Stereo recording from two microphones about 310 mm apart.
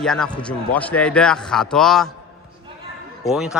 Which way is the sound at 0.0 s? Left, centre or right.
Centre.